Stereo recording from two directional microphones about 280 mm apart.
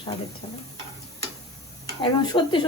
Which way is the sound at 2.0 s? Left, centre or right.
Centre.